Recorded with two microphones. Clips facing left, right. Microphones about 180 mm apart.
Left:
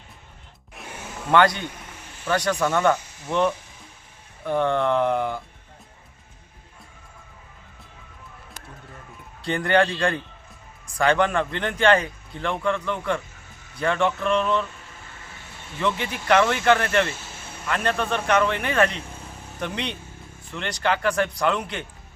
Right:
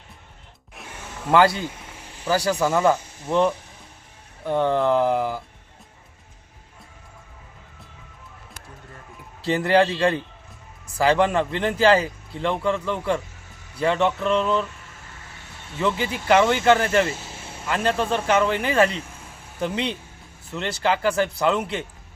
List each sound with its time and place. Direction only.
0.8 s a sound: centre (ahead or behind)
1.3 s a man's voice: 5° right (ahead or behind)
2.9 s speech: 30° right (ahead or behind)
4.4 s a man's voice: 5° right (ahead or behind)
9.4 s a man's voice: 5° right (ahead or behind)
15.8 s a man's voice: 5° right (ahead or behind)
17.9 s speech: 30° right (ahead or behind)
18.3 s speech: 5° right (ahead or behind)